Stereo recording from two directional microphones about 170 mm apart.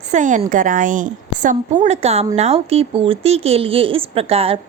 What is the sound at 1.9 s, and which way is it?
A woman's voice, 40° right (ahead or behind).